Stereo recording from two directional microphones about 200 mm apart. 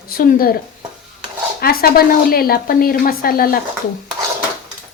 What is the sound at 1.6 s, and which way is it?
A woman's voice, 50° left (ahead or behind).